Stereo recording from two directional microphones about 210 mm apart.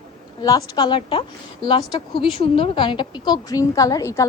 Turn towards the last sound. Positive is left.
turn(degrees=15)  # may be behind; listen again after turning